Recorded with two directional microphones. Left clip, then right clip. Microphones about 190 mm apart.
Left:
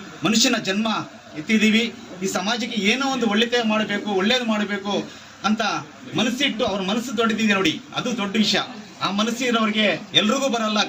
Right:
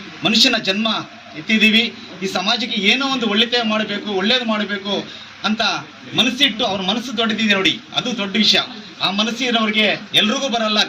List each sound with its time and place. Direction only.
0.2 s a man's voice: 15° left (ahead or behind)